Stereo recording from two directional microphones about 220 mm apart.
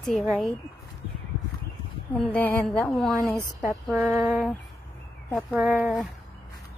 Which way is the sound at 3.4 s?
15° left (ahead or behind).